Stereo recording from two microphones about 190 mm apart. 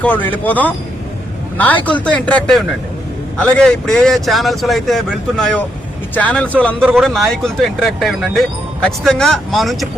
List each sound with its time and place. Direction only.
0.0 s a man's voice: 10° left (ahead or behind)